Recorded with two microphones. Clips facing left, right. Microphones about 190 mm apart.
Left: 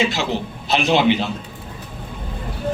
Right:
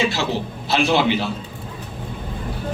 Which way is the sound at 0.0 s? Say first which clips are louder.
Left 1 dB; 20° left (ahead or behind).